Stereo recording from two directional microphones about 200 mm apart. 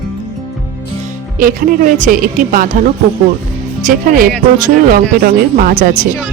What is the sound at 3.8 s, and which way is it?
Speech, 45° right (ahead or behind).